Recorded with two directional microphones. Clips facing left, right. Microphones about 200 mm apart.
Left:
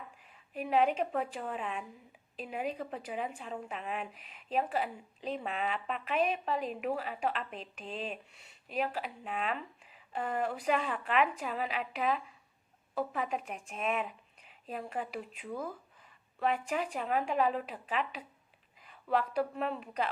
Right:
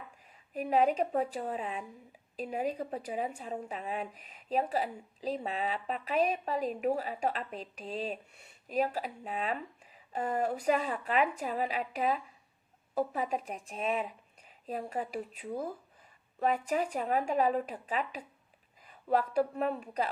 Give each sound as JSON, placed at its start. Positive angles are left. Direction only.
{"t": 0.5, "sound": "a woman's voice", "side_deg": -40}